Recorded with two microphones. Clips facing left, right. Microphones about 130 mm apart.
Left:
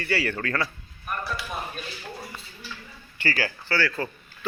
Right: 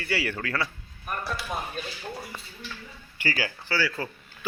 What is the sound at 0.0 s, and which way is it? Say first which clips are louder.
Speech: left 3 dB; 10° right (ahead or behind).